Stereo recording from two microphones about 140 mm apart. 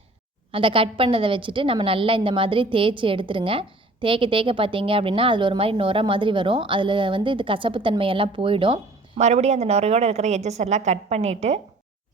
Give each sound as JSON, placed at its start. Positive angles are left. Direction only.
{"t": 0.5, "sound": "a woman's voice", "side_deg": -40}
{"t": 9.1, "sound": "a woman's voice", "side_deg": -55}